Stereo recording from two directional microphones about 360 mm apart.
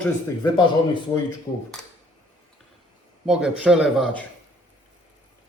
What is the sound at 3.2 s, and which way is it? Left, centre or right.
Speech, centre.